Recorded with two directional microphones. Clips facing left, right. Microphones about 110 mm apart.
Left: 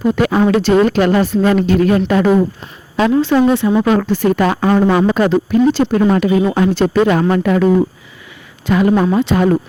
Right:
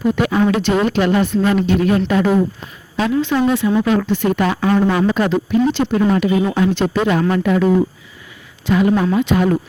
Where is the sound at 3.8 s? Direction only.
50° left (ahead or behind).